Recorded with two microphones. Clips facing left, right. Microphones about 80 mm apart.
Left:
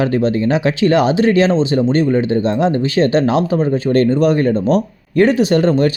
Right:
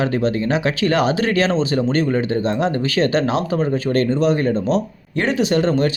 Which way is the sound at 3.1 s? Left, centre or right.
Right.